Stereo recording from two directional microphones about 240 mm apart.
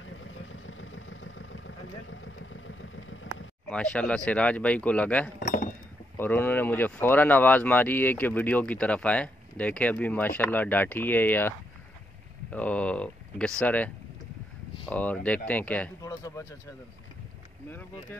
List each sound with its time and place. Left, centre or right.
0.0 s vehicle: left
3.6 s speech: centre
5.4 s chink: left
6.1 s speech: centre